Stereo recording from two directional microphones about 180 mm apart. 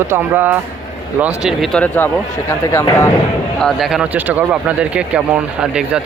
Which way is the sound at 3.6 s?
Centre (ahead or behind).